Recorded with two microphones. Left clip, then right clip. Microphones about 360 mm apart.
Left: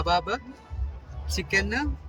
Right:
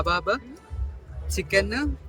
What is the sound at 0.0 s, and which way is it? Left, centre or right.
Speech, centre.